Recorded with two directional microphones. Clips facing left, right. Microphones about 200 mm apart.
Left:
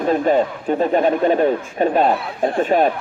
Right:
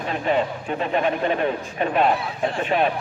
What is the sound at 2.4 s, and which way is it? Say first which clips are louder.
Speech: left 6 dB; 50° left (ahead or behind).